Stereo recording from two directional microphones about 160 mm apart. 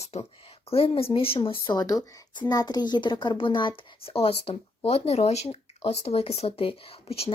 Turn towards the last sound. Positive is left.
turn(degrees=40)  # may be behind; listen again after turning